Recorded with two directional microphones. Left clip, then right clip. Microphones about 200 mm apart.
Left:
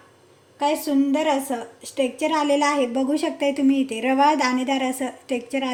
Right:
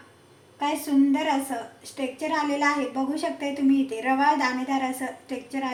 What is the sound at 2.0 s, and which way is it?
A woman's voice, 55° left (ahead or behind).